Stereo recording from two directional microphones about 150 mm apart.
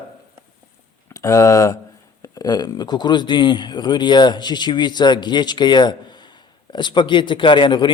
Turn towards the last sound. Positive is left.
turn(degrees=30)  # may be behind; listen again after turning